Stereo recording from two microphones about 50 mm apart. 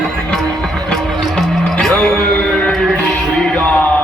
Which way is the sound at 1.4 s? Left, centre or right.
Centre.